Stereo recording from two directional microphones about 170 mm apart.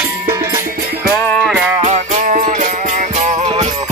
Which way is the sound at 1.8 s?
45° right (ahead or behind).